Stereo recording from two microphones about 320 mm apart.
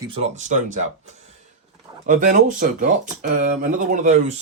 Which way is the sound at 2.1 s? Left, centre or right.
Right.